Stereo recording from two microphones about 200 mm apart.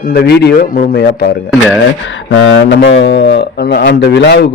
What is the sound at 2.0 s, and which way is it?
Speech, 75° left (ahead or behind).